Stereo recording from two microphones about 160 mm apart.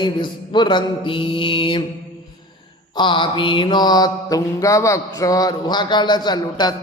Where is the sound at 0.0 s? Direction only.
30° left (ahead or behind).